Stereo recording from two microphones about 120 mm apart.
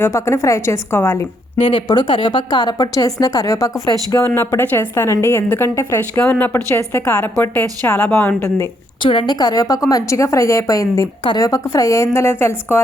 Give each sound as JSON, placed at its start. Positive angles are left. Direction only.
{"t": 0.0, "sound": "a woman's voice", "side_deg": 25}
{"t": 1.9, "sound": "a woman's voice", "side_deg": 40}
{"t": 4.4, "sound": "a woman's voice", "side_deg": 15}
{"t": 6.1, "sound": "a woman's voice", "side_deg": 15}
{"t": 9.0, "sound": "a woman's voice", "side_deg": 45}